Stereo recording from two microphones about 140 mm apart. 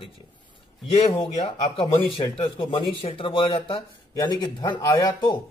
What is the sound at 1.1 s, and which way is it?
Speech, 35° left (ahead or behind).